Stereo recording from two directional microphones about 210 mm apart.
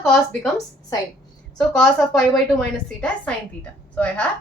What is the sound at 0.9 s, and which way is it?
Speech, 15° left (ahead or behind).